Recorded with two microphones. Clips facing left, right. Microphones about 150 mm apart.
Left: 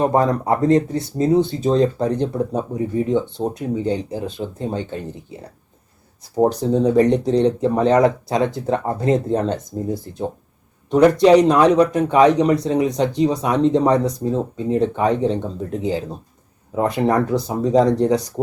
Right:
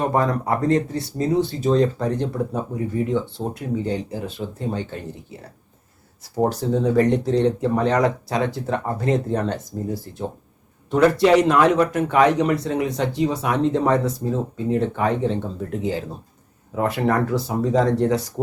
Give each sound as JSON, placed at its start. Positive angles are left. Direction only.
{"t": 0.0, "sound": "speech", "side_deg": 25}
{"t": 6.3, "sound": "speech", "side_deg": 20}